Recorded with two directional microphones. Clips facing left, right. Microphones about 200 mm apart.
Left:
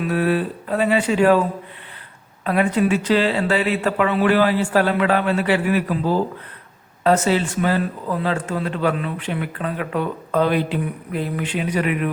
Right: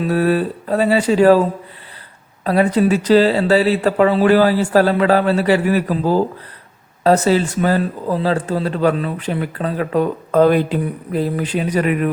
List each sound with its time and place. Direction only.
0.0 s speech: 35° right (ahead or behind)